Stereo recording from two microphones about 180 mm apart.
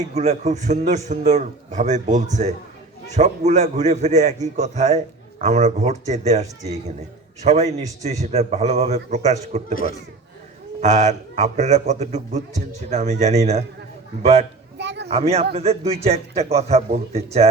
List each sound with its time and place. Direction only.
0.1 s a man's voice: 40° right (ahead or behind)
10.8 s a man's voice: 40° right (ahead or behind)
14.8 s a sound: 70° right (ahead or behind)
15.0 s a man's voice: 35° right (ahead or behind)